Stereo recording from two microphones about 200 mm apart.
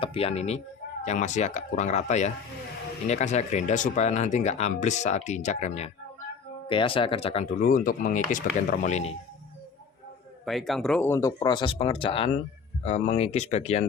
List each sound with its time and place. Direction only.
0.0 s speech: 30° left (ahead or behind)
7.6 s speech: 40° left (ahead or behind)
8.9 s speech: 30° left (ahead or behind)
10.4 s speech: centre (ahead or behind); by 13.8 s 30° left (ahead or behind)